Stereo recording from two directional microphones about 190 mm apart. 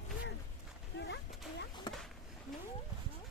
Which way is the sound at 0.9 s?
65° left (ahead or behind).